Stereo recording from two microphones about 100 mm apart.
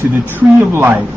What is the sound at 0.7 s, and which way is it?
Speech, 25° right (ahead or behind).